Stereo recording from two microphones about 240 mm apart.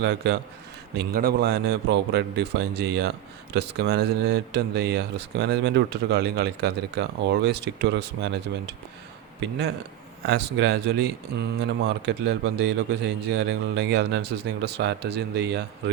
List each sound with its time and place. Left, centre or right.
0.0 s a man's voice: right